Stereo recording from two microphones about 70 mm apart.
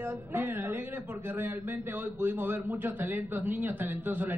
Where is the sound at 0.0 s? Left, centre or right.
Right.